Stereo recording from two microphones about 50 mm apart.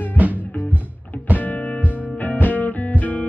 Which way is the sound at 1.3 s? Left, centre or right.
Left.